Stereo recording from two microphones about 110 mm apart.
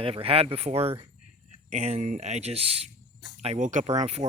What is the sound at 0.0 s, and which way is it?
Speech, 60° right (ahead or behind).